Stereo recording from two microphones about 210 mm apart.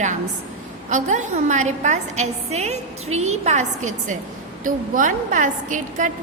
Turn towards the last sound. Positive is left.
turn(degrees=-35)  # may be behind; listen again after turning